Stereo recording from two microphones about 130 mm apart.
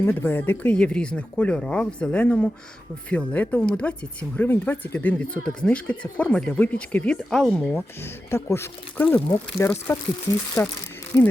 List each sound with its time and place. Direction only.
0.0 s speech: 15° left (ahead or behind)
8.0 s speech: 20° left (ahead or behind)